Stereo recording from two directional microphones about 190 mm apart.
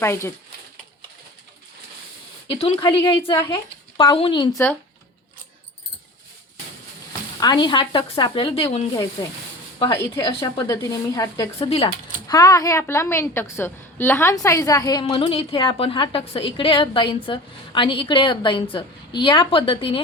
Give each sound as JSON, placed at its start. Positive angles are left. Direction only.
{"t": 0.0, "sound": "a woman's voice", "side_deg": 15}
{"t": 2.5, "sound": "a woman's voice", "side_deg": 30}
{"t": 7.3, "sound": "a woman's voice", "side_deg": 20}
{"t": 11.7, "sound": "a woman's voice", "side_deg": 30}
{"t": 12.3, "sound": "a woman's voice", "side_deg": 20}